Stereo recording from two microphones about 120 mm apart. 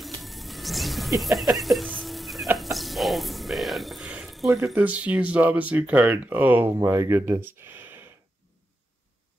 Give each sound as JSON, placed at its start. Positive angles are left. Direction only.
{"t": 0.0, "sound": "music", "side_deg": 0}
{"t": 2.5, "sound": "a sound", "side_deg": 0}
{"t": 4.8, "sound": "speech", "side_deg": -10}